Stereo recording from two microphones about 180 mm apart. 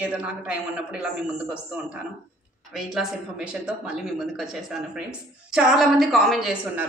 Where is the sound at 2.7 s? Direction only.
Centre (ahead or behind).